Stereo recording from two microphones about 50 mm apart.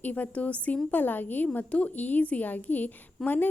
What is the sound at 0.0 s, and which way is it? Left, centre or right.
A woman's voice, left.